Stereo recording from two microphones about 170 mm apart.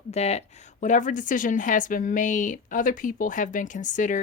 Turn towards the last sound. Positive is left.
turn(degrees=50)  # may be behind; listen again after turning